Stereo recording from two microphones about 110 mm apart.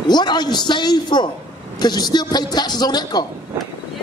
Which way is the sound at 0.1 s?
40° left (ahead or behind).